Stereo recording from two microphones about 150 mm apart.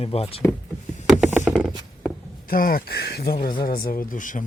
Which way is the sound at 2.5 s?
75° left (ahead or behind).